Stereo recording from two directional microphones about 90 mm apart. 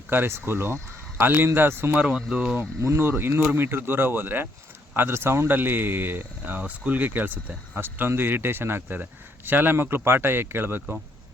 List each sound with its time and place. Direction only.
0.1 s a man's voice: 25° right (ahead or behind)
2.0 s speech: 10° right (ahead or behind)
2.6 s a man's voice: 25° right (ahead or behind)